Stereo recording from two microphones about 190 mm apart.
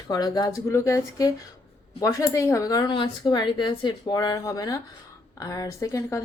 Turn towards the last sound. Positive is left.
turn(degrees=15)  # may be behind; listen again after turning